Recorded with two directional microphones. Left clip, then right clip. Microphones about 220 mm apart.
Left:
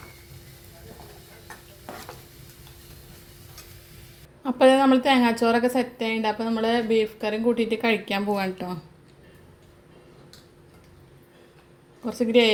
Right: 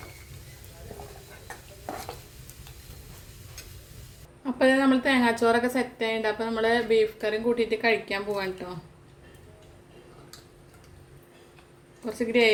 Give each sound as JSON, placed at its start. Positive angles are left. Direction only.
{"t": 4.4, "sound": "a woman's voice", "side_deg": 30}
{"t": 12.0, "sound": "a woman's voice", "side_deg": 25}